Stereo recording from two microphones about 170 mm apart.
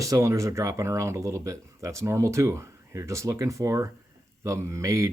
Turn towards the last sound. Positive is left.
turn(degrees=-20)  # may be behind; listen again after turning